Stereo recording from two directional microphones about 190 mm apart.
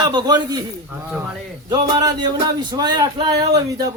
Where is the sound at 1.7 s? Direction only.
20° right (ahead or behind).